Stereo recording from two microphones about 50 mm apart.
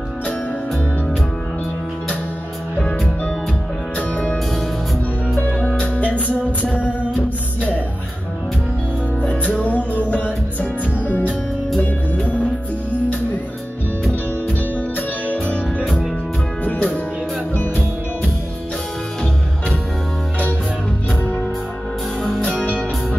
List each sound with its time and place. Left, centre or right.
5.7 s music: left
9.5 s music: left
15.8 s music: centre
16.6 s music: left